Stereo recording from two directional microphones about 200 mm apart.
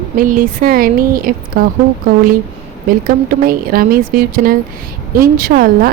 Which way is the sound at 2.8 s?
45° right (ahead or behind).